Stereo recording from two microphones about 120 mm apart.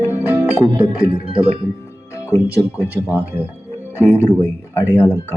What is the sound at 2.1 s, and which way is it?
Speech, 25° left (ahead or behind).